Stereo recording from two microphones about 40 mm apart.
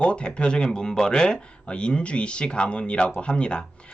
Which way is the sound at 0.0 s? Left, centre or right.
Left.